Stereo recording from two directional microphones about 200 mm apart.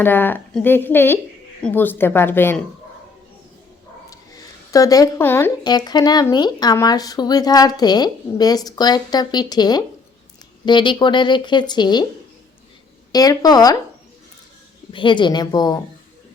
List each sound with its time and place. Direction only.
0.0 s a woman's voice: 10° left (ahead or behind)
4.1 s speech: 15° left (ahead or behind)
13.1 s speech: 20° left (ahead or behind)
14.9 s speech: 25° left (ahead or behind)